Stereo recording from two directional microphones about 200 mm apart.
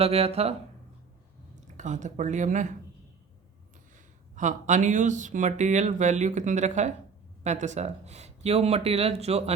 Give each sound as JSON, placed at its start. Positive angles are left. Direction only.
{"t": 0.0, "sound": "speech", "side_deg": -30}
{"t": 1.6, "sound": "speech", "side_deg": -35}
{"t": 4.4, "sound": "speech", "side_deg": -40}